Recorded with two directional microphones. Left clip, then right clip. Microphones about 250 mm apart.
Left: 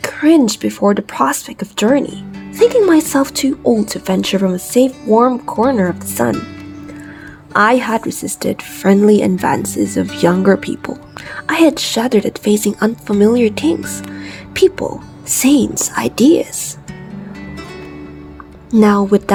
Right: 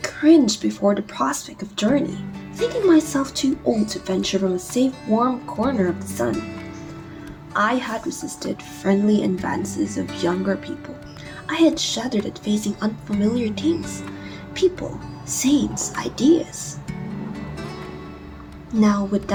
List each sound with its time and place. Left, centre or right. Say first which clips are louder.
0.0 s speech: left 4 dB; left
7.5 s speech: left 9 dB; left
18.7 s speech: left 10 dB; left